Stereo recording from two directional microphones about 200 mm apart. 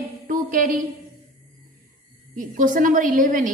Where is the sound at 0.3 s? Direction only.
45° right (ahead or behind).